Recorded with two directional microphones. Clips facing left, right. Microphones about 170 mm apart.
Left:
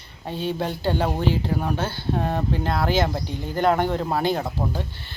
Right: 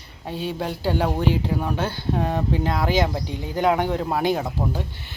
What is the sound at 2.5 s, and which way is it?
Speech, 15° right (ahead or behind).